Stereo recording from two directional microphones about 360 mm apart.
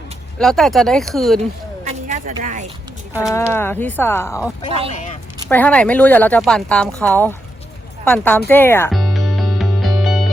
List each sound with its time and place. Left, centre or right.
0.3 s speech: centre
1.4 s a sound: centre
3.2 s speech: centre
8.0 s music: centre